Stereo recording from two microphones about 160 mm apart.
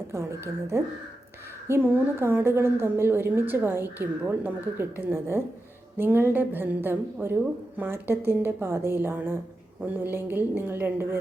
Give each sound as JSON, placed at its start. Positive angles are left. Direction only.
{"t": 0.1, "sound": "a woman's voice", "side_deg": -15}